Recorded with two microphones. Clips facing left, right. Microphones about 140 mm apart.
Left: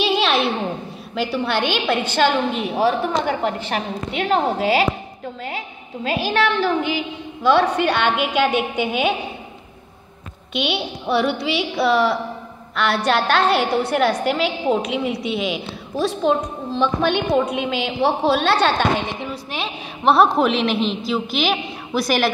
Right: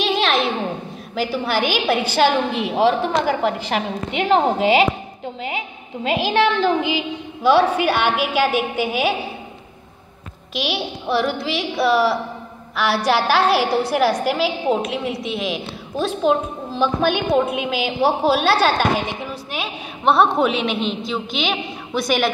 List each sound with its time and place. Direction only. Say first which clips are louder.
0.0 s a sound: left 1 dB; 5° left (ahead or behind)
1.1 s a woman's voice: even; centre (ahead or behind); by 4.8 s 15° right (ahead or behind)
6.0 s a woman's voice: right 2 dB; 15° right (ahead or behind)
10.5 s a woman's voice: left 1 dB; centre (ahead or behind)